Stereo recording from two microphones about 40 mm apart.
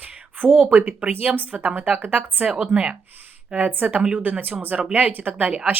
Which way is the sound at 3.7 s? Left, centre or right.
Right.